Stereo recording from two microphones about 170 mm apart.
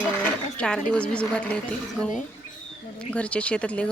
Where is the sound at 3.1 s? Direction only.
5° left (ahead or behind).